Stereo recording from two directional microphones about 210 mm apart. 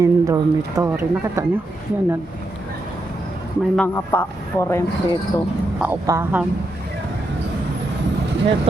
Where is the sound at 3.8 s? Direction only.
10° left (ahead or behind).